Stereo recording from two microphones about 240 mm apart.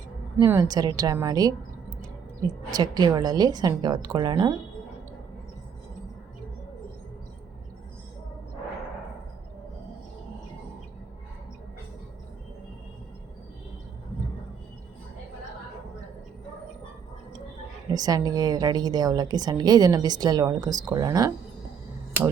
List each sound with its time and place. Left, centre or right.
0.3 s a woman's voice: centre
2.6 s a woman's voice: centre
17.9 s a woman's voice: centre